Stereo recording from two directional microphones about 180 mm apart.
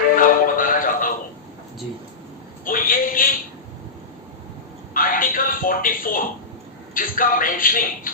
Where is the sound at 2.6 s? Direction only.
50° left (ahead or behind).